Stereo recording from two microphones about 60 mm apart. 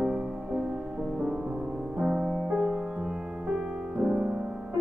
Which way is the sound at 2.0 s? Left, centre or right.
Centre.